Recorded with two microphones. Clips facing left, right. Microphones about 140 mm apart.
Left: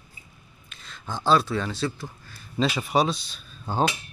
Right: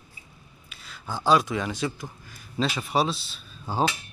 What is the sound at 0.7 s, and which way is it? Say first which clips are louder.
A man's voice: even; 10° right (ahead or behind).